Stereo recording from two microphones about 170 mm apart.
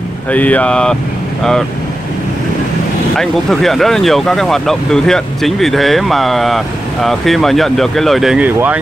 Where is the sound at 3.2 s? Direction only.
Centre (ahead or behind).